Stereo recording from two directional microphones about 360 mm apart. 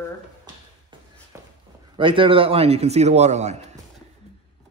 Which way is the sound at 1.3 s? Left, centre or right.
Centre.